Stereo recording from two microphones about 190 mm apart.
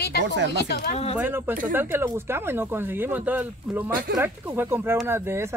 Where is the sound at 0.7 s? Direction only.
55° left (ahead or behind).